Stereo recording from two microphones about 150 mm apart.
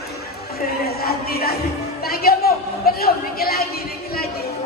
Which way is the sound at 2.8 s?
90° left.